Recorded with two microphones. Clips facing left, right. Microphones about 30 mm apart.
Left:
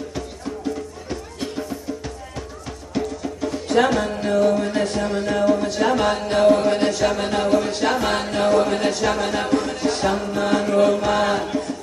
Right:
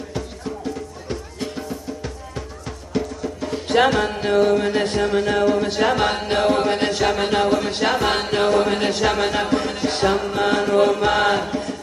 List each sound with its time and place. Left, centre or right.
3.6 s music: right